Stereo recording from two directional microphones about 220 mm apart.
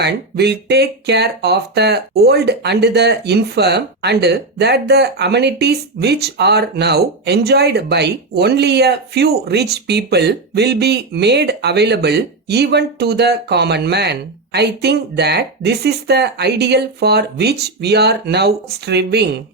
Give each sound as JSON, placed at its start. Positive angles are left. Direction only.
{"t": 0.0, "sound": "speech", "side_deg": -50}